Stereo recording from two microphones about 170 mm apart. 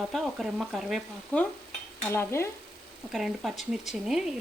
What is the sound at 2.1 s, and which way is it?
Stir, 15° left (ahead or behind).